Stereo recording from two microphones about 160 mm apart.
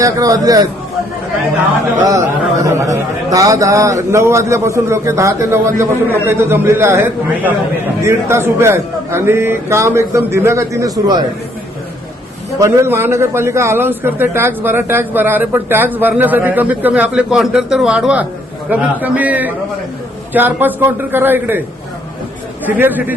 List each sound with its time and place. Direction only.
0.0 s a man's voice: 20° right (ahead or behind)
2.0 s a man's voice: 20° right (ahead or behind)
12.5 s a man's voice: 20° right (ahead or behind)
22.6 s a man's voice: 10° right (ahead or behind)